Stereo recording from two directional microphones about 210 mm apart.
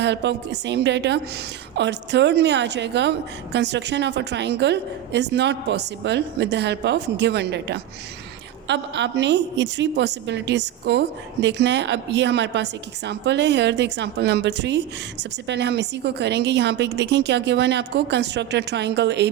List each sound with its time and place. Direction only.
0.0 s a woman's voice: 55° right (ahead or behind)